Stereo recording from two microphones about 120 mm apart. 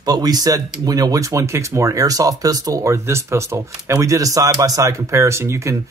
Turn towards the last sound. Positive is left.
turn(degrees=-25)  # may be behind; listen again after turning